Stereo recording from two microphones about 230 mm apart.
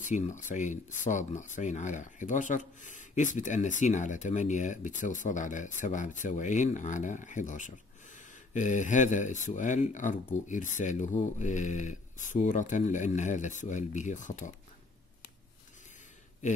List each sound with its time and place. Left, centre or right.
0.0 s speech: left